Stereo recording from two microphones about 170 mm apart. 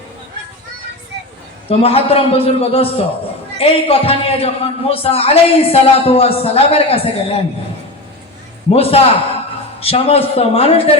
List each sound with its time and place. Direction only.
1.8 s a man's voice: 35° left (ahead or behind)
8.7 s a man's voice: 35° left (ahead or behind)